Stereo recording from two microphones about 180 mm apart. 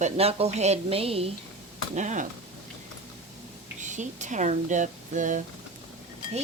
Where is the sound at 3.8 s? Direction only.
40° right (ahead or behind).